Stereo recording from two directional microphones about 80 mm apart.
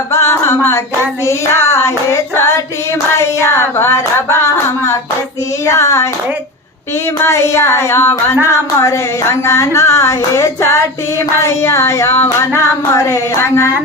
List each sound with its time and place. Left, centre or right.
0.1 s music: left
1.2 s speech: left
7.2 s speech: left